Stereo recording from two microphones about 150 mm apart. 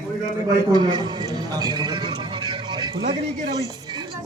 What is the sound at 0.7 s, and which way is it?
Speech, 30° right (ahead or behind).